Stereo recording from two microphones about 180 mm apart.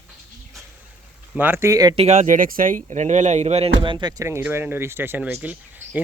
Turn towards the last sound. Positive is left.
turn(degrees=-10)  # may be behind; listen again after turning